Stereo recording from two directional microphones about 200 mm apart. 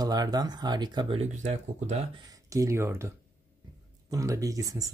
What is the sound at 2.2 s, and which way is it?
Speech, 15° right (ahead or behind).